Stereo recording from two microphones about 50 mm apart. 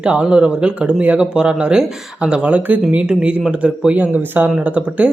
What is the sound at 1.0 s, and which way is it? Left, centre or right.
Speech, right.